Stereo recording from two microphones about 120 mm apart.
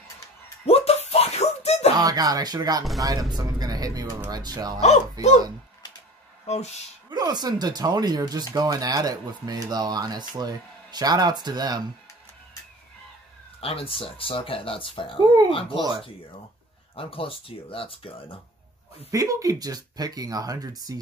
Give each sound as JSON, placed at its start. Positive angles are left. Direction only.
{"t": 0.7, "sound": "a sound", "side_deg": 60}
{"t": 2.0, "sound": "speech", "side_deg": -30}
{"t": 6.4, "sound": "speech", "side_deg": 65}
{"t": 7.1, "sound": "speech", "side_deg": -35}
{"t": 13.6, "sound": "speech", "side_deg": 50}
{"t": 16.9, "sound": "speech", "side_deg": 50}
{"t": 19.0, "sound": "speech", "side_deg": -30}